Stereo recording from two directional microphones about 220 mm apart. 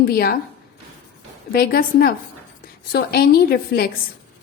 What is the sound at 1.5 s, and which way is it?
A woman's voice, 45° left (ahead or behind).